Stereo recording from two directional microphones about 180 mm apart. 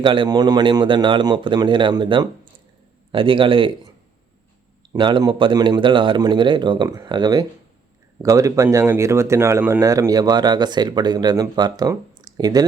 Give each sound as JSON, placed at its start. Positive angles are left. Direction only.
{"t": 0.0, "sound": "speech", "side_deg": -25}
{"t": 4.9, "sound": "speech", "side_deg": -25}